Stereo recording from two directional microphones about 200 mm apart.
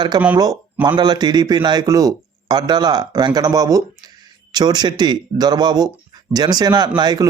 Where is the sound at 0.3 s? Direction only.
20° right (ahead or behind).